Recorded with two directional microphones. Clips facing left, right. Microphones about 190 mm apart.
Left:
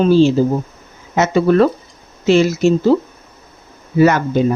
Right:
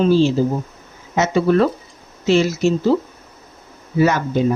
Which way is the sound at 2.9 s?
60° left (ahead or behind).